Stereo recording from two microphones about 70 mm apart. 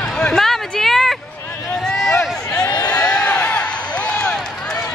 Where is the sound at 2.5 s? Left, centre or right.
Left.